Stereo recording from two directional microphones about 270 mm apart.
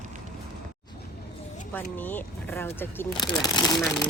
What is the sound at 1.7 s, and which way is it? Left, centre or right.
Speech, centre.